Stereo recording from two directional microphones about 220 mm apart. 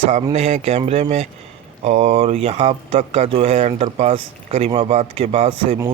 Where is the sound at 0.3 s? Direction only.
30° right (ahead or behind).